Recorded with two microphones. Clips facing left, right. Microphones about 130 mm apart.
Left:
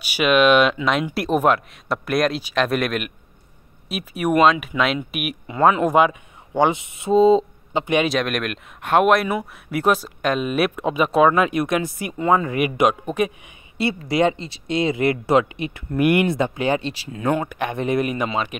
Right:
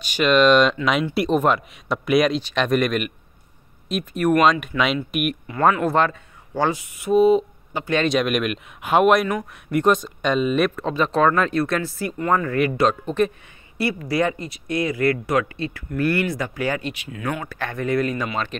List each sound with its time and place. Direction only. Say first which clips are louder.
0.0 s speech: even; 10° left (ahead or behind)
5.6 s speech: left 3 dB; 15° left (ahead or behind)
8.0 s speech: right 1 dB; centre (ahead or behind)
14.0 s speech: left 4 dB; 20° left (ahead or behind)